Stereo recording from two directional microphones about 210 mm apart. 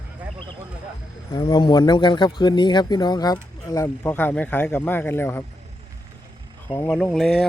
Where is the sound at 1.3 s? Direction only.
20° left (ahead or behind).